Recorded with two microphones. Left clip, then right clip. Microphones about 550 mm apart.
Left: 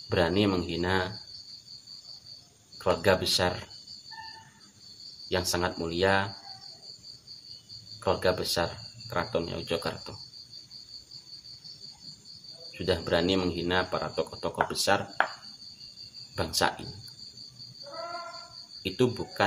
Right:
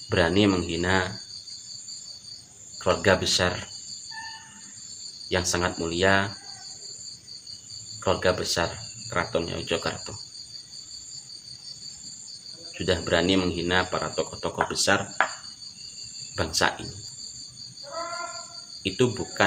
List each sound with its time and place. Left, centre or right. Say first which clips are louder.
0.1 s speech: right 4 dB; left
2.8 s speech: right 3 dB; left
5.3 s speech: right 3 dB; left
8.0 s speech: right 3 dB; left
12.7 s speech: right 3 dB; left
16.3 s speech: right 3 dB; left
18.8 s speech: right 3 dB; left